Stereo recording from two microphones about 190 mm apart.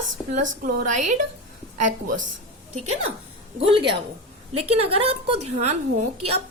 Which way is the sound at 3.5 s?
30° right (ahead or behind).